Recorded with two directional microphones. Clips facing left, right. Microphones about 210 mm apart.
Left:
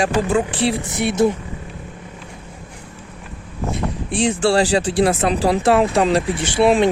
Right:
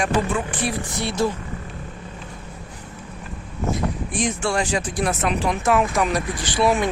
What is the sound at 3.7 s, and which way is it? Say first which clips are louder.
Speech: left 5 dB; 30° left (ahead or behind).